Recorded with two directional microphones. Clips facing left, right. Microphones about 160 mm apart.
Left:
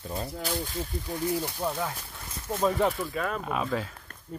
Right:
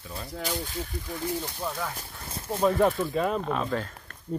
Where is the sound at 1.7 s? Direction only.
15° left (ahead or behind).